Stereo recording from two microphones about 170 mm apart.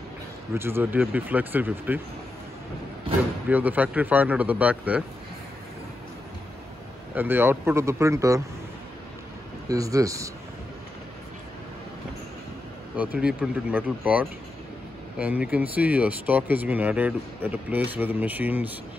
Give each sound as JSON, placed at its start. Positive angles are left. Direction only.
{"t": 0.6, "sound": "speech", "side_deg": -15}
{"t": 3.4, "sound": "speech", "side_deg": -10}
{"t": 7.2, "sound": "speech", "side_deg": -10}
{"t": 9.7, "sound": "speech", "side_deg": -20}
{"t": 13.2, "sound": "speech", "side_deg": -5}